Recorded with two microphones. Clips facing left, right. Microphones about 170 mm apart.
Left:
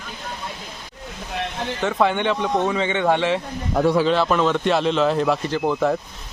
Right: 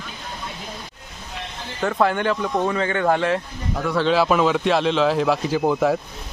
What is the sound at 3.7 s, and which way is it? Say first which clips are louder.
Speech: left 8 dB; 60° left (ahead or behind).